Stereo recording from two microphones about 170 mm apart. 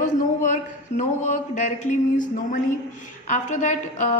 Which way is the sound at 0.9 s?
45° left (ahead or behind).